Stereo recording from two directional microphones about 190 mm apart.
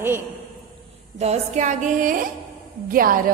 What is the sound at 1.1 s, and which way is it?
A woman's voice, 35° right (ahead or behind).